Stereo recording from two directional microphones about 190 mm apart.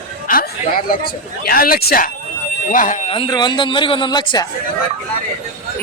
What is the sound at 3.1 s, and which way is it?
Speech, 25° left (ahead or behind).